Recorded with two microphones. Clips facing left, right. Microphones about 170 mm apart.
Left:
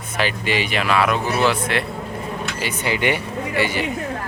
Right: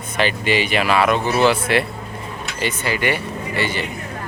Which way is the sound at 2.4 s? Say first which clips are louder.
Right 1 dB; 5° left (ahead or behind).